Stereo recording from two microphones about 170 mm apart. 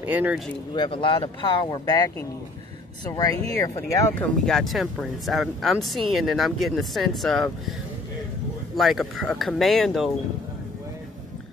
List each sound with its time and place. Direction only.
0.0 s speech: 10° right (ahead or behind)
0.7 s speech: 30° left (ahead or behind)
4.5 s speech: centre (ahead or behind)
8.7 s speech: centre (ahead or behind)